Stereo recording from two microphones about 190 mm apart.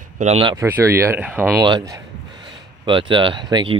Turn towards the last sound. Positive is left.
turn(degrees=-25)  # may be behind; listen again after turning